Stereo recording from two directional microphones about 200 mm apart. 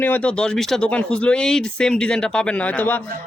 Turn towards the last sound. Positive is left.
turn(degrees=10)  # may be behind; listen again after turning